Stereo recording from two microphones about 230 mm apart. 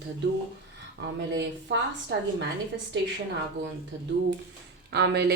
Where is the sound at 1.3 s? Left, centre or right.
Right.